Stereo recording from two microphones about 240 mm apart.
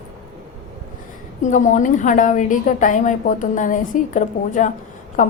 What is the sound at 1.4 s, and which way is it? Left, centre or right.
A woman's voice, left.